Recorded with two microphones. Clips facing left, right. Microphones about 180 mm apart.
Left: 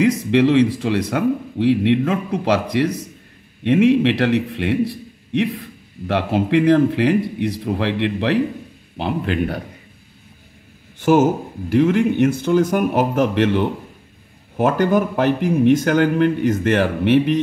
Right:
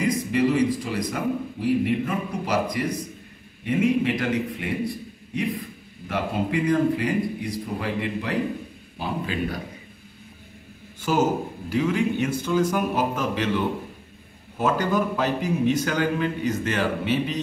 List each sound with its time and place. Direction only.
0.0 s a man's voice: 80° left
8.9 s a man's voice: 70° left (ahead or behind)
11.0 s a man's voice: 55° left (ahead or behind)